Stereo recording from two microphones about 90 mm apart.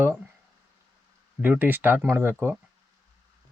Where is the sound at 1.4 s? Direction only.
20° right (ahead or behind).